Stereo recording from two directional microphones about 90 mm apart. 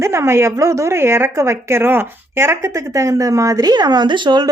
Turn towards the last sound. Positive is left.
turn(degrees=-60)  # may be behind; listen again after turning